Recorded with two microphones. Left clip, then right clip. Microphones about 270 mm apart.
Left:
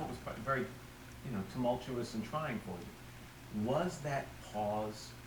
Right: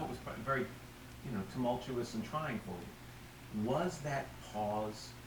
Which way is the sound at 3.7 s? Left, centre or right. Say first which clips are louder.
Left 1 dB; centre.